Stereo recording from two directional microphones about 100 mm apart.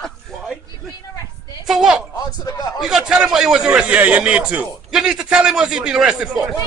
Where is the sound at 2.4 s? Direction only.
35° left (ahead or behind).